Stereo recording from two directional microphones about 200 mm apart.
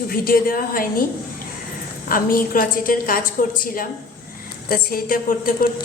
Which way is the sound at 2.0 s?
45° left (ahead or behind).